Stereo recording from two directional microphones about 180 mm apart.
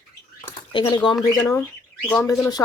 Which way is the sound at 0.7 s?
25° left (ahead or behind).